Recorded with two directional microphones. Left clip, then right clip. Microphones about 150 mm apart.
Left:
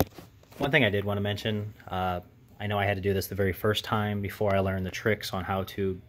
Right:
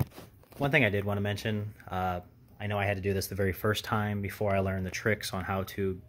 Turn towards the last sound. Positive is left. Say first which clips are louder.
# left 2 dB
turn(degrees=10)  # may be behind; listen again after turning